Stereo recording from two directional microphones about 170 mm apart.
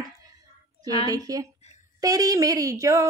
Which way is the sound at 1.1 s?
20° right (ahead or behind).